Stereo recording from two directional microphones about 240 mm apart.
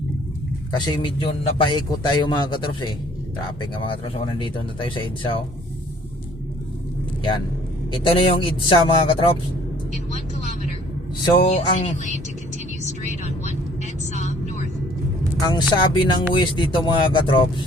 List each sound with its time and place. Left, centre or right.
0.7 s a man's voice: centre
7.9 s a man's voice: centre
11.2 s a man's voice: centre
13.4 s vehicle: left
15.4 s a man's voice: centre